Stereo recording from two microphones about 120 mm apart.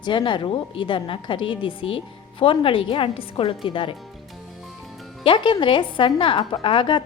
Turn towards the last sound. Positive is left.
turn(degrees=40)  # may be behind; listen again after turning